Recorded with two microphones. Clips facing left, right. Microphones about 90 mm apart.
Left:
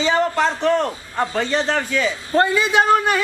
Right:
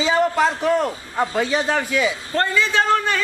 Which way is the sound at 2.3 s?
15° left (ahead or behind).